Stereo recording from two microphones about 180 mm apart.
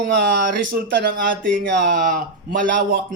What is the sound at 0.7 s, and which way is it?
Speech, 55° right (ahead or behind).